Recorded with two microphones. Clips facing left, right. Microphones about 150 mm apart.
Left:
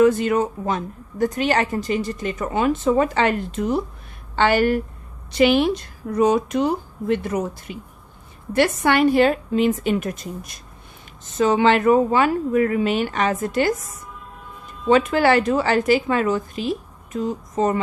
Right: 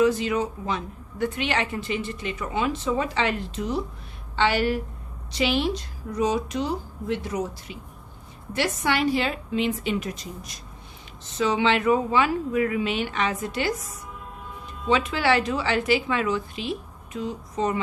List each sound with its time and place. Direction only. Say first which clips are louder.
0.0 s a woman's voice: left 5 dB; 50° left (ahead or behind)
14.8 s a woman's voice: left 6 dB; 50° left (ahead or behind)